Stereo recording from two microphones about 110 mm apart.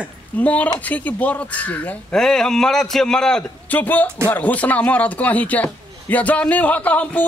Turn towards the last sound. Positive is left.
turn(degrees=15)  # may be behind; listen again after turning